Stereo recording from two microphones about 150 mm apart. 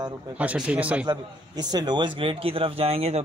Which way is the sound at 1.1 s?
30° right (ahead or behind).